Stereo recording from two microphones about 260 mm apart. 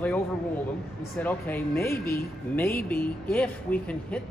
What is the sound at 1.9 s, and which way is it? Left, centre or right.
Speech, left.